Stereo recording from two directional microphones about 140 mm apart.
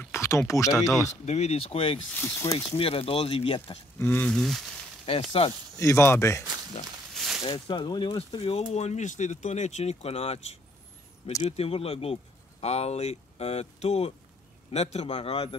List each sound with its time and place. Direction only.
0.0 s a sound: 20° left (ahead or behind)
1.2 s speech: 50° left (ahead or behind)
2.1 s speech: 20° left (ahead or behind)
2.8 s speech: 40° left (ahead or behind)
4.0 s speech: 15° left (ahead or behind)
5.4 s speech: 45° left (ahead or behind)
5.8 s speech: 20° left (ahead or behind)
7.2 s a sound: centre (ahead or behind)
7.4 s speech: 35° left (ahead or behind)